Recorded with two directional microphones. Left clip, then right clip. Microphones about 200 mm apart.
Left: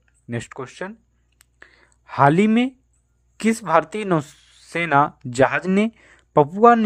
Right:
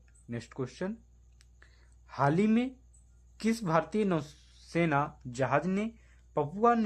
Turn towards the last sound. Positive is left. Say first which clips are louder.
# left 14 dB
turn(degrees=45)  # may be behind; listen again after turning